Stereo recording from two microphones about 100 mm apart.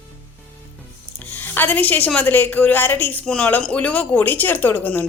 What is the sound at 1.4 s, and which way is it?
A woman's voice, 20° left (ahead or behind).